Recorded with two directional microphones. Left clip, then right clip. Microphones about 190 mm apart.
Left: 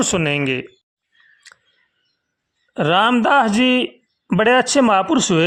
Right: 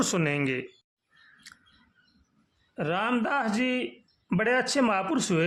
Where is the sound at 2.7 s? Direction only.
40° left (ahead or behind).